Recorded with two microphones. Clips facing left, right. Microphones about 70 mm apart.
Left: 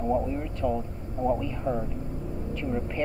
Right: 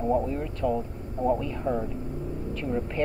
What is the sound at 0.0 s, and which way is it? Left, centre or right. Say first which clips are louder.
Speech: right 1 dB; centre.